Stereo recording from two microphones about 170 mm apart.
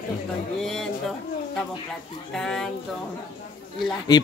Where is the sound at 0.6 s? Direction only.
Centre (ahead or behind).